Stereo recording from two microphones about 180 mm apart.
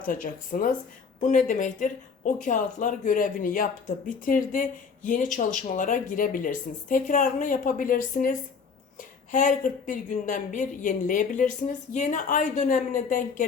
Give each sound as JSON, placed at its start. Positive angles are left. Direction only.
{"t": 0.0, "sound": "speech", "side_deg": 50}